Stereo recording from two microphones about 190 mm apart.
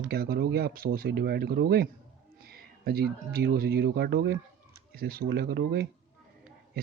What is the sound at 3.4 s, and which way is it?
Speech, 60° right (ahead or behind).